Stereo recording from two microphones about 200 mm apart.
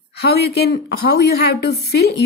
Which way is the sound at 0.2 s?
55° left (ahead or behind).